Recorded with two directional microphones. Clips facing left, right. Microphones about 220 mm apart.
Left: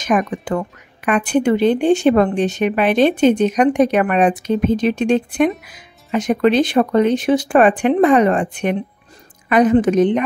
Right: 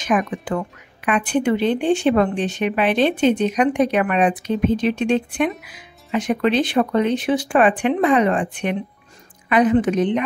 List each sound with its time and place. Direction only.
0.0 s speech: 45° left (ahead or behind)